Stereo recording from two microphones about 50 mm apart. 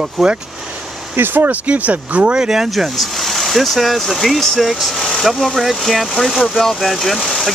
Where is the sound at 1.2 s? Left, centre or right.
Right.